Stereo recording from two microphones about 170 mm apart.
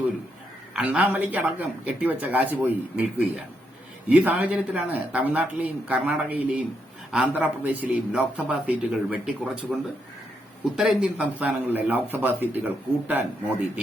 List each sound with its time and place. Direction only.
0.7 s a man's voice: 5° right (ahead or behind)